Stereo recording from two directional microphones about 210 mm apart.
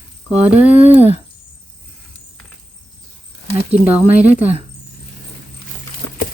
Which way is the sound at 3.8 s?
5° right (ahead or behind).